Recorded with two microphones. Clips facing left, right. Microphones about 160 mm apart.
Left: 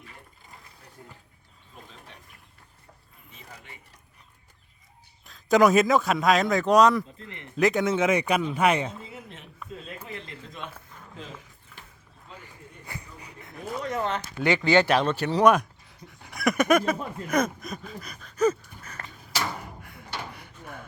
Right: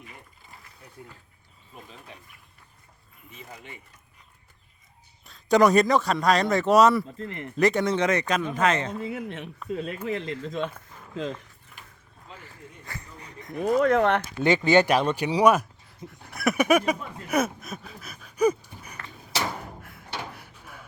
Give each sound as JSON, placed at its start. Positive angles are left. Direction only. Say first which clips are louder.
{"t": 1.0, "sound": "speech", "louder": "right 2 dB", "side_deg": -5}
{"t": 5.2, "sound": "a man's voice", "louder": "even", "side_deg": 0}
{"t": 7.2, "sound": "speech", "louder": "right 8 dB", "side_deg": -45}
{"t": 7.5, "sound": "a man's voice", "louder": "even", "side_deg": 0}
{"t": 8.9, "sound": "speech", "louder": "right 9 dB", "side_deg": -65}
{"t": 10.1, "sound": "speech", "louder": "right 10 dB", "side_deg": -90}
{"t": 12.8, "sound": "a sound", "louder": "left 1 dB", "side_deg": 10}
{"t": 13.6, "sound": "speech", "louder": "right 10 dB", "side_deg": -60}
{"t": 14.3, "sound": "speech", "louder": "right 2 dB", "side_deg": -20}
{"t": 19.5, "sound": "a sound", "louder": "right 1 dB", "side_deg": 0}